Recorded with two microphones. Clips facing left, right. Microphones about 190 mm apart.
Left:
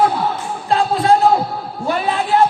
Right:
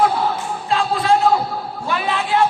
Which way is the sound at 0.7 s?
40° left (ahead or behind).